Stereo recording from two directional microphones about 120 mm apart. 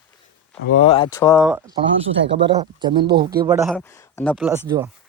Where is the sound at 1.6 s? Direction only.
35° right (ahead or behind).